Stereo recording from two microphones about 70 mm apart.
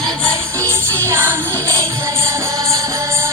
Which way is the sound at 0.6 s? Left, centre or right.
Right.